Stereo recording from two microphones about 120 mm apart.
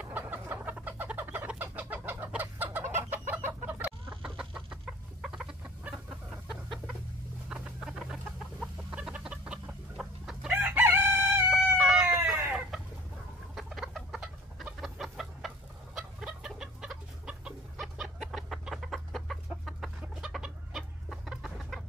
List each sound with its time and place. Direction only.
0.0 s chicken: 15° right (ahead or behind)
7.4 s chicken: 5° right (ahead or behind)
11.5 s chicken: 5° right (ahead or behind)
12.2 s chicken: 20° right (ahead or behind)
13.6 s chicken: centre (ahead or behind)